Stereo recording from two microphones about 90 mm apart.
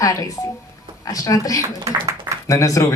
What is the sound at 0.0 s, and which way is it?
Speech, 40° left (ahead or behind).